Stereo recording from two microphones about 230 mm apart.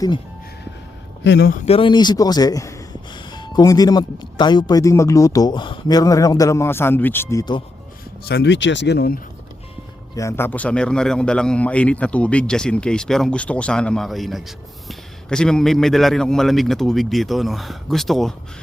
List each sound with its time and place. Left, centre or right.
1.2 s speech: left
1.6 s speech: left
8.2 s speech: left
10.2 s a man's voice: centre